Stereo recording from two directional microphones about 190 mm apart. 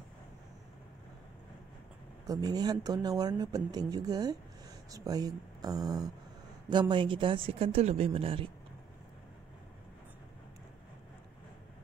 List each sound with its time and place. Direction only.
2.2 s speech: 20° right (ahead or behind)